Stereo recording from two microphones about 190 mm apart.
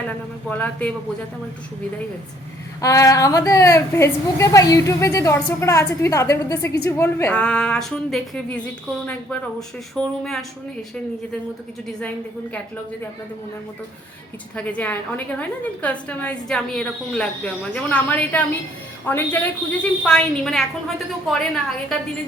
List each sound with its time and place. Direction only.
0.4 s a woman's voice: 10° left (ahead or behind)
2.8 s a woman's voice: 15° left (ahead or behind)
14.5 s a woman's voice: 5° left (ahead or behind)